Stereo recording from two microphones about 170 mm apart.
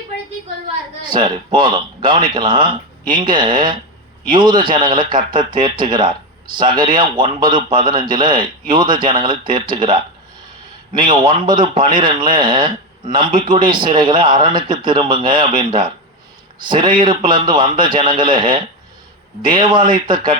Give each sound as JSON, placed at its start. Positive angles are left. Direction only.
{"t": 1.0, "sound": "a man's voice", "side_deg": -25}